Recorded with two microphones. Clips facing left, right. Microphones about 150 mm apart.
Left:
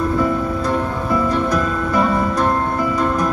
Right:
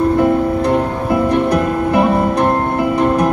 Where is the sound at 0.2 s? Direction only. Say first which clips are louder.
Right 6 dB; 65° right (ahead or behind).